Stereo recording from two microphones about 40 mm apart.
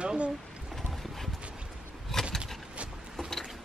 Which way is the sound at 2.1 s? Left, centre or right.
Centre.